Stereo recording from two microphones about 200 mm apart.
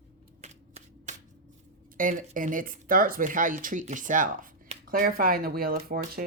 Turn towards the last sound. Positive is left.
turn(degrees=-40)  # may be behind; listen again after turning